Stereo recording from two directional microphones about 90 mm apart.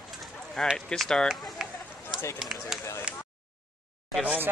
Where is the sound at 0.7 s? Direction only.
5° left (ahead or behind).